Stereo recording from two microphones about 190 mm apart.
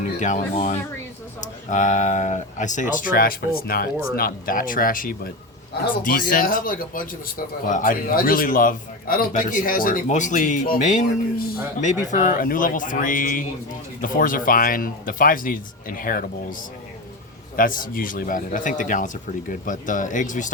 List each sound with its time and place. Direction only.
0.2 s speech: 40° left (ahead or behind)
12.2 s speech: 45° left (ahead or behind)
17.6 s speech: 45° left (ahead or behind)